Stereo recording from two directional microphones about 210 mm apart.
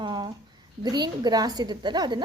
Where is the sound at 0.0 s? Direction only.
20° right (ahead or behind).